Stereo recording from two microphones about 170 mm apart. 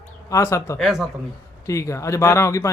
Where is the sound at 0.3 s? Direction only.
20° left (ahead or behind).